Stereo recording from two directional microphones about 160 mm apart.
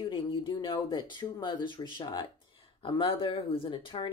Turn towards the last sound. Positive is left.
turn(degrees=30)  # may be behind; listen again after turning